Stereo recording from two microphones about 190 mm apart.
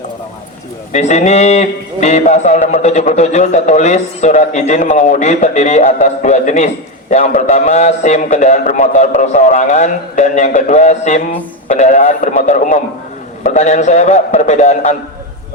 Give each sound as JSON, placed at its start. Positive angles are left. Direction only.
{"t": 0.9, "sound": "a man's voice", "side_deg": 40}